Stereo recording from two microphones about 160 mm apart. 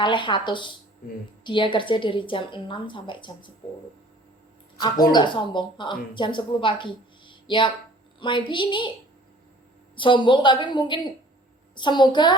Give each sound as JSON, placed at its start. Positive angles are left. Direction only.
{"t": 0.0, "sound": "a woman's voice", "side_deg": 30}
{"t": 5.1, "sound": "speech", "side_deg": 30}
{"t": 7.3, "sound": "music", "side_deg": 30}
{"t": 8.2, "sound": "a woman's voice", "side_deg": 30}
{"t": 9.9, "sound": "speech", "side_deg": 30}